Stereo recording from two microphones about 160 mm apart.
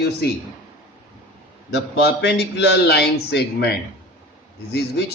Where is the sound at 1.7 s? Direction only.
90° left.